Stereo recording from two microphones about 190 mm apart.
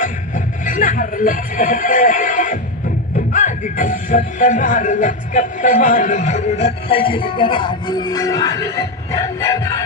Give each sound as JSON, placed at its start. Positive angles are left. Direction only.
{"t": 0.0, "sound": "music", "side_deg": 40}